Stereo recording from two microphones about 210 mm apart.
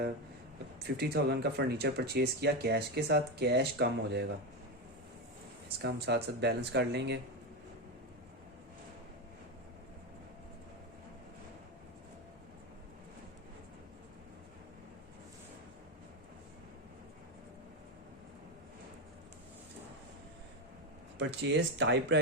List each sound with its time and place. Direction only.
0.9 s speech: 50° right (ahead or behind)
5.6 s speech: 50° right (ahead or behind)
21.2 s speech: 55° right (ahead or behind)